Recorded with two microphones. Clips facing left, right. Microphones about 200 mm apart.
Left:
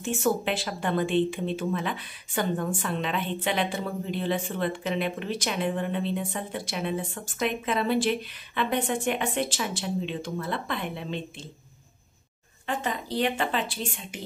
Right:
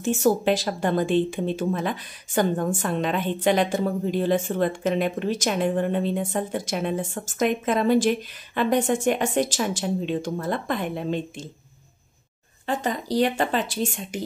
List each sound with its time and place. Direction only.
0.0 s speech: 40° right (ahead or behind)
12.6 s a woman's voice: 40° right (ahead or behind)